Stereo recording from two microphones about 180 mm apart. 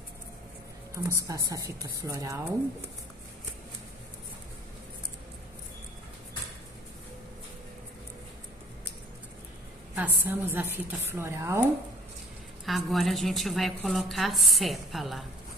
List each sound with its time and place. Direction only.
1.0 s a woman's voice: 20° right (ahead or behind)
9.9 s a woman's voice: 10° right (ahead or behind)
12.6 s a woman's voice: centre (ahead or behind)